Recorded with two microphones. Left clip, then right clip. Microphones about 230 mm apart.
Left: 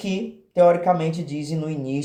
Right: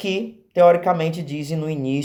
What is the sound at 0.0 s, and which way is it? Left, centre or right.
Speech, right.